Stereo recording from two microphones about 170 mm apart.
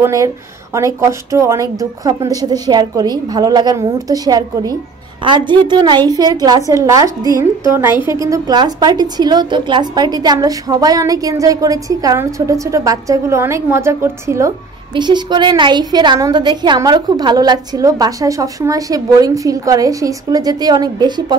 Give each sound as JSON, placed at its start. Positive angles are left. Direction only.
{"t": 0.0, "sound": "a woman's voice", "side_deg": -20}
{"t": 15.0, "sound": "a woman's voice", "side_deg": -25}